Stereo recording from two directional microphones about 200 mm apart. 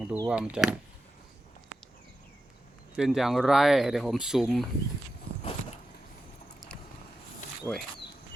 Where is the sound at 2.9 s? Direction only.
Centre (ahead or behind).